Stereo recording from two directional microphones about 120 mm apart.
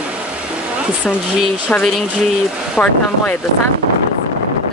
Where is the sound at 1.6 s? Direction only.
10° left (ahead or behind).